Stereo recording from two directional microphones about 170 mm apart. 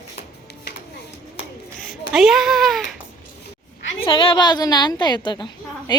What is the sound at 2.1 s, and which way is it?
Speech, centre (ahead or behind).